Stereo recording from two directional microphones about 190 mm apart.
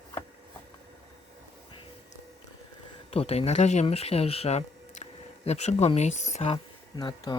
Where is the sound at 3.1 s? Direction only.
30° left (ahead or behind).